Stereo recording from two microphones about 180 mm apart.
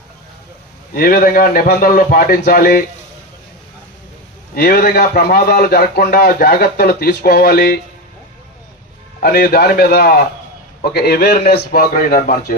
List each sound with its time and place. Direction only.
0.9 s a man's voice: 55° left (ahead or behind)
4.5 s a man's voice: 60° left (ahead or behind)
9.2 s a man's voice: 60° left (ahead or behind)